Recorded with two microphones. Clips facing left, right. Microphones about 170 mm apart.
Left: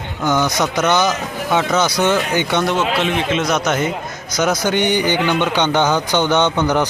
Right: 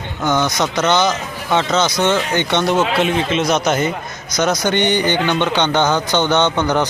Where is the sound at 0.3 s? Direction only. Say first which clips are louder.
Even; 10° left (ahead or behind).